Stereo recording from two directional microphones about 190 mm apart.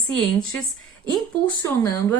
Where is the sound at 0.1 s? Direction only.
5° left (ahead or behind).